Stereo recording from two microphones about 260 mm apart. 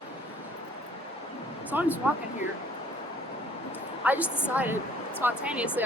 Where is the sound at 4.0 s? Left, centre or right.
Centre.